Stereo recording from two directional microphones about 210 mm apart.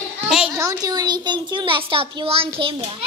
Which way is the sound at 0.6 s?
15° right (ahead or behind).